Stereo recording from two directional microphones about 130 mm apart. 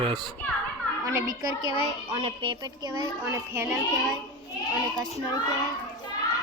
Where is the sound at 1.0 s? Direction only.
25° right (ahead or behind).